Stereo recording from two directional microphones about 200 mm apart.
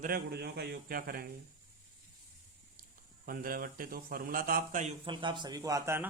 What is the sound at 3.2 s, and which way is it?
A man's voice, 45° right (ahead or behind).